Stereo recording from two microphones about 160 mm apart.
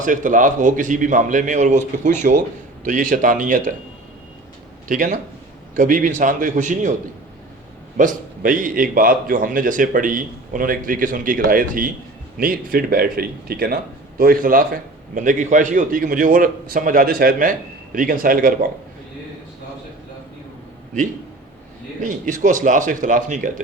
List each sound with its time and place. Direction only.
0.0 s a man's voice: 55° right (ahead or behind)
4.9 s a man's voice: 50° right (ahead or behind)
7.9 s a man's voice: 55° right (ahead or behind)
22.0 s a man's voice: 55° right (ahead or behind)